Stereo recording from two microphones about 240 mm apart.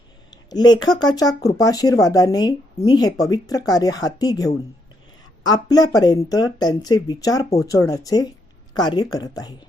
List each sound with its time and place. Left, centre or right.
0.3 s speech: centre